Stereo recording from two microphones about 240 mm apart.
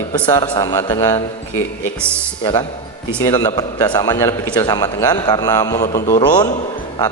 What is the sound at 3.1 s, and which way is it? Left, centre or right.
A man's voice, centre.